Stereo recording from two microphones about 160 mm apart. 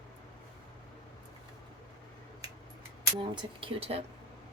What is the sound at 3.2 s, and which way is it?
Speech, 30° right (ahead or behind).